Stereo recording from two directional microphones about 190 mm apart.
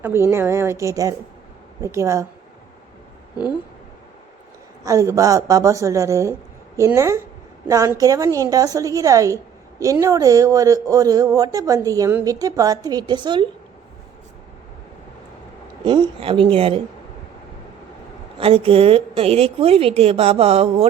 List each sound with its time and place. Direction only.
0.0 s a woman's voice: 10° right (ahead or behind)
4.9 s a woman's voice: 15° right (ahead or behind)
15.8 s a man's voice: 25° right (ahead or behind)
18.3 s a woman's voice: 30° right (ahead or behind)